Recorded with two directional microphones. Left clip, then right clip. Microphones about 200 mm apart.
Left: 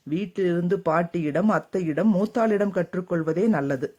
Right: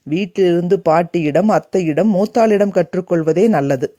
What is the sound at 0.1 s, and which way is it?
Speech, 35° right (ahead or behind).